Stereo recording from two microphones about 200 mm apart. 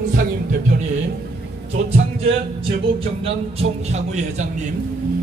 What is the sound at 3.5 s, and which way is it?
Speech, 35° right (ahead or behind).